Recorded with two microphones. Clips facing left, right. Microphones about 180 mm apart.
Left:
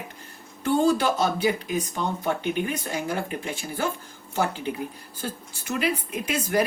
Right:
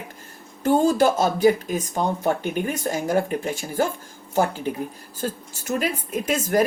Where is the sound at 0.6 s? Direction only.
45° right (ahead or behind).